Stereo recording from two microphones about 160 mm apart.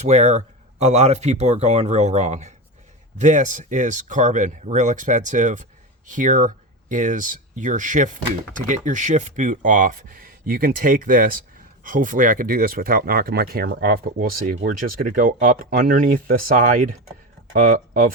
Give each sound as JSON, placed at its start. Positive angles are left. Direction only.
{"t": 0.0, "sound": "speech", "side_deg": -45}